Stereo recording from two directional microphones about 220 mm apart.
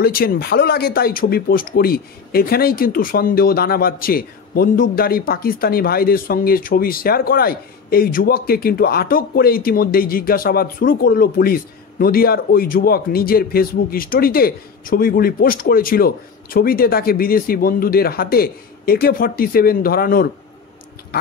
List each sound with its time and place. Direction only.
0.0 s speech: 45° left (ahead or behind)